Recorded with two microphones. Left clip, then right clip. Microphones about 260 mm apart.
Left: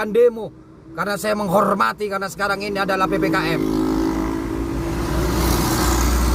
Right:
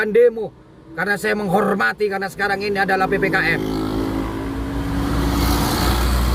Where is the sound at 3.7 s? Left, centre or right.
Left.